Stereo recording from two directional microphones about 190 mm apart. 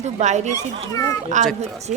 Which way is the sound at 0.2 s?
40° right (ahead or behind).